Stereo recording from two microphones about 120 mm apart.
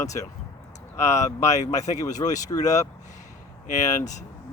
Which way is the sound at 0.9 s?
25° left (ahead or behind).